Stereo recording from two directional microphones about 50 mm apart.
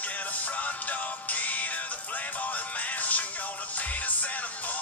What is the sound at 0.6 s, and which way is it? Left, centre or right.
Music, left.